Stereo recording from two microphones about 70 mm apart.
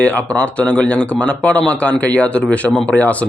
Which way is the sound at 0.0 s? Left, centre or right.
Centre.